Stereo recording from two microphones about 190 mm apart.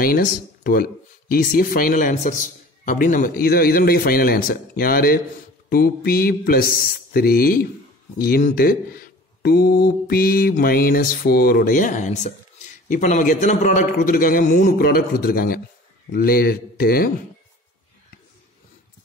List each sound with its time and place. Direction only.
0.0 s speech: 50° left (ahead or behind)